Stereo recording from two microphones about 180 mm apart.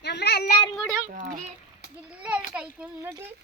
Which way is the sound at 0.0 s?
65° left (ahead or behind).